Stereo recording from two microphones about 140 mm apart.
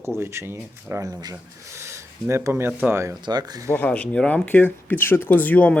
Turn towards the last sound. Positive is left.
turn(degrees=10)  # may be behind; listen again after turning